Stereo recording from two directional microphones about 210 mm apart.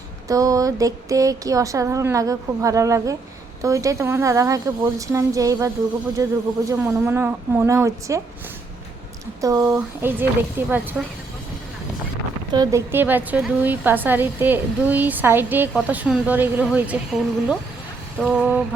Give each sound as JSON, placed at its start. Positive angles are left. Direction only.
{"t": 0.3, "sound": "a woman's voice", "side_deg": -15}
{"t": 9.4, "sound": "a woman's voice", "side_deg": -15}
{"t": 12.5, "sound": "a woman's voice", "side_deg": -15}